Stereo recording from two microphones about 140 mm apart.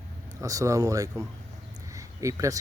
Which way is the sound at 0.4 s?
25° right (ahead or behind).